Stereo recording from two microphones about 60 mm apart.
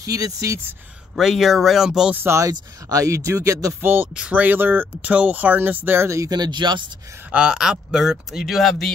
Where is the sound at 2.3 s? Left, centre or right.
Right.